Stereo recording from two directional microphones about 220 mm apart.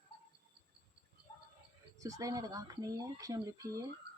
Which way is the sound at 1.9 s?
15° right (ahead or behind).